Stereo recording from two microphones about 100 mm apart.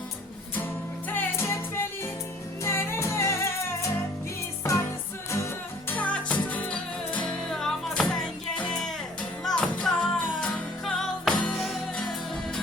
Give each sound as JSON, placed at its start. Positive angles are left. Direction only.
{"t": 1.1, "sound": "music", "side_deg": 25}
{"t": 5.9, "sound": "music", "side_deg": 15}